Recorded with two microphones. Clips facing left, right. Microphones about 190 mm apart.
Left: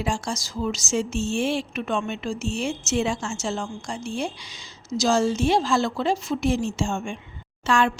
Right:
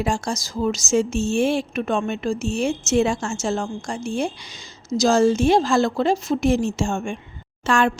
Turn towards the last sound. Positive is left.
turn(degrees=-50)  # may be behind; listen again after turning